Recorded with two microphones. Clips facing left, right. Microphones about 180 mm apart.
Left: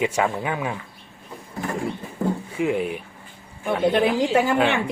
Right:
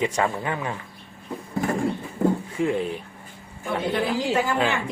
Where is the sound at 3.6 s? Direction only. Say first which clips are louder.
Left 5 dB; 70° left (ahead or behind).